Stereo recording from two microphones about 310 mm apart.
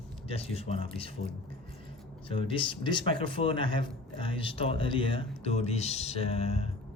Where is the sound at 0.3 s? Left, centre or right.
Centre.